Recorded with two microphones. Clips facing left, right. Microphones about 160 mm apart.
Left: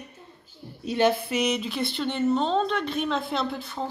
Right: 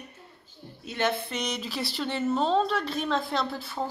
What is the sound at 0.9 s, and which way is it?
Speech, 15° left (ahead or behind).